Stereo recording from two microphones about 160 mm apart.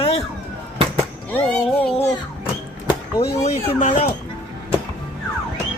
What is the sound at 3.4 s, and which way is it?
Speech, 40° left (ahead or behind).